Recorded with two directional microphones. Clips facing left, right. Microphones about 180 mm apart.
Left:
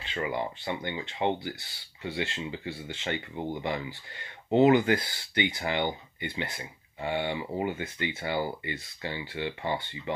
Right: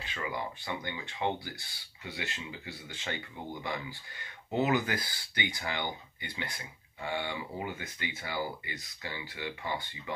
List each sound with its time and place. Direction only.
0.1 s speech: 25° left (ahead or behind)